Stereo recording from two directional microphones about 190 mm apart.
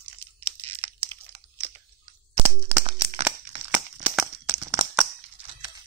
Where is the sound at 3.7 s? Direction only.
10° right (ahead or behind).